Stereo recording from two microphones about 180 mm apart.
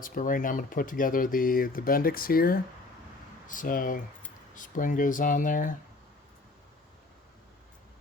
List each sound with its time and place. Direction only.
0.0 s speech: 50° left (ahead or behind)